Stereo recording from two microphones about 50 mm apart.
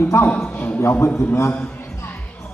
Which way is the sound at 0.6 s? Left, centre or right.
Left.